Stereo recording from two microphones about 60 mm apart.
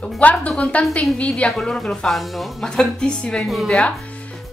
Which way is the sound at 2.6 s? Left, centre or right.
Centre.